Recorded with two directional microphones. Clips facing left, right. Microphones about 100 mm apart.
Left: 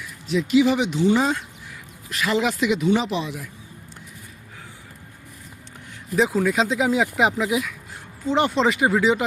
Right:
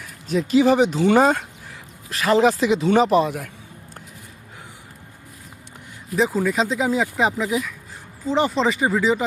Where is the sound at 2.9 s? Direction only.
45° right (ahead or behind).